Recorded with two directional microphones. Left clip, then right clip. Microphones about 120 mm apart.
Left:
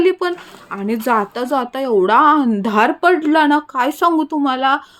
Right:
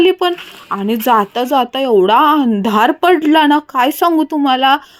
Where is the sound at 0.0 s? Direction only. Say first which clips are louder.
Right 4 dB; 25° right (ahead or behind).